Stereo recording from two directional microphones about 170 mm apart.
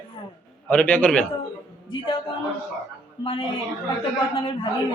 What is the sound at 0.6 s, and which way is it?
Speech, 10° left (ahead or behind).